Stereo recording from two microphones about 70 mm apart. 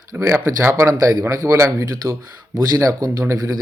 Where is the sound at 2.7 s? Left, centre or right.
Right.